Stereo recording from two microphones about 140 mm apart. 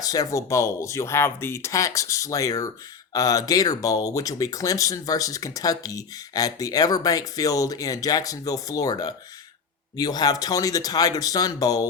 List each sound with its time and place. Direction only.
0.0 s speech: 25° left (ahead or behind)